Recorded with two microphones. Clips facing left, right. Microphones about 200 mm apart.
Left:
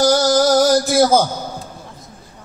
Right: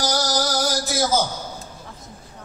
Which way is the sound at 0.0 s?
55° left (ahead or behind).